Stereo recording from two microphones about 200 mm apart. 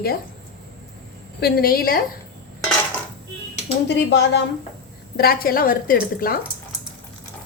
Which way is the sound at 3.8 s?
60° left (ahead or behind).